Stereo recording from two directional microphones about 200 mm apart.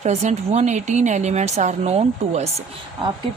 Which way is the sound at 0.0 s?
35° right (ahead or behind).